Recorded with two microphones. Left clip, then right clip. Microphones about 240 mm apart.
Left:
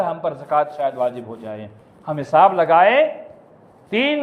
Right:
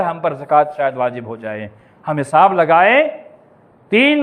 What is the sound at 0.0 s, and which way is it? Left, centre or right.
A man's voice, right.